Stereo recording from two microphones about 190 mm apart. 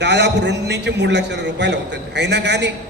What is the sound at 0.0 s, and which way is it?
A man's voice, 65° right (ahead or behind).